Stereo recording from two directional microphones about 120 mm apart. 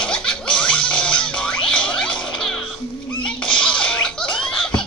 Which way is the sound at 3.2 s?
5° left (ahead or behind).